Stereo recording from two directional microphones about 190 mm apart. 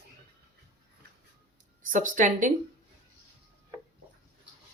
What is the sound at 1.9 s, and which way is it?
Speech, 45° right (ahead or behind).